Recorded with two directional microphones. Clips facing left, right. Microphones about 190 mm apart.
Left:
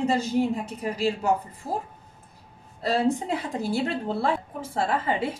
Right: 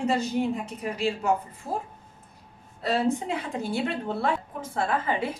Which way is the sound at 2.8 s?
35° left (ahead or behind).